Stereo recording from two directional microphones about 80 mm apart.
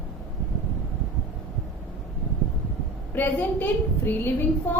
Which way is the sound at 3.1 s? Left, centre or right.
Left.